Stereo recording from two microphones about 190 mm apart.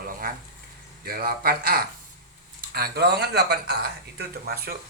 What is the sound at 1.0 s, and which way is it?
A man's voice, 50° right (ahead or behind).